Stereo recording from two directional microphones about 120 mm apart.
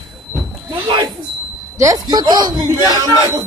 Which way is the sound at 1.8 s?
30° right (ahead or behind).